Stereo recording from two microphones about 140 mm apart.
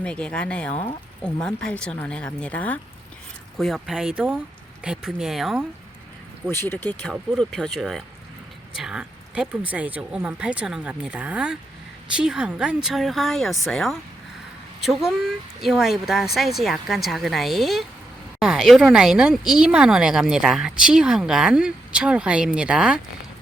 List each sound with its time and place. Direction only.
0.0 s speech: 10° left (ahead or behind)
3.6 s speech: centre (ahead or behind)
6.5 s speech: 15° left (ahead or behind)
7.0 s speech: centre (ahead or behind)